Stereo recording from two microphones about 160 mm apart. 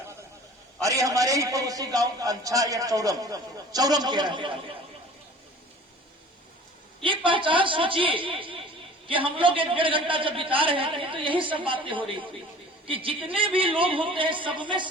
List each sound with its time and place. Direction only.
0.8 s a man's voice: 20° right (ahead or behind)
7.3 s a man's voice: 30° right (ahead or behind)